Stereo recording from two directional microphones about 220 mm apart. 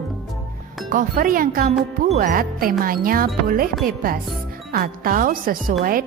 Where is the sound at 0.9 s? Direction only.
40° right (ahead or behind).